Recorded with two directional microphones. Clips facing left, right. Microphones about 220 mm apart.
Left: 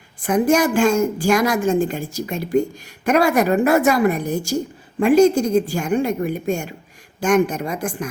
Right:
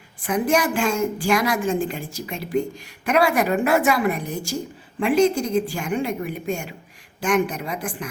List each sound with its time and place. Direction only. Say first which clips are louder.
0.2 s a woman's voice: left 5 dB; 45° left (ahead or behind)